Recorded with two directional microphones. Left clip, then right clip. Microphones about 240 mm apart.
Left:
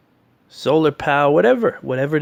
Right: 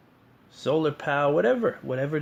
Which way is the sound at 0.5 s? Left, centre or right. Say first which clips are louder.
Left 9 dB; left.